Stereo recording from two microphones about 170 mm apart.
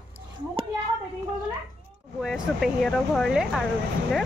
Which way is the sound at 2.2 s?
Centre (ahead or behind).